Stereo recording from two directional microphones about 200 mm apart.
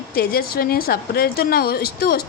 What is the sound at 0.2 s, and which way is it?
A woman's voice, 50° left (ahead or behind).